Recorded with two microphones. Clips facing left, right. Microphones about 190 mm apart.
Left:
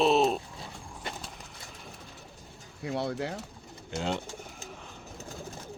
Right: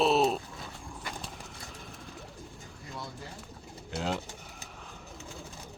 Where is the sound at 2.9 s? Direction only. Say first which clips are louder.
Left 12 dB; 70° left (ahead or behind).